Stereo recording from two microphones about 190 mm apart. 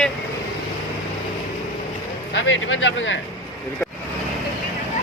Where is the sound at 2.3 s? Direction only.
75° left (ahead or behind).